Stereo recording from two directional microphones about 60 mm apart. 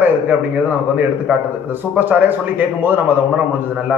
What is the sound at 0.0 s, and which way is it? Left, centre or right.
A man's voice, right.